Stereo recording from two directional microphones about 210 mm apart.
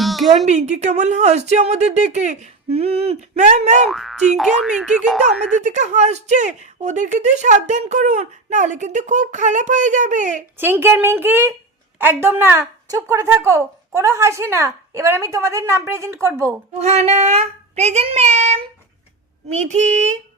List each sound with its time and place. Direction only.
0.0 s a sound: centre (ahead or behind)
0.4 s speech: 30° right (ahead or behind)
3.8 s speech: centre (ahead or behind)
5.6 s speech: 35° right (ahead or behind)
10.6 s a woman's voice: 10° right (ahead or behind)
16.7 s speech: 30° right (ahead or behind)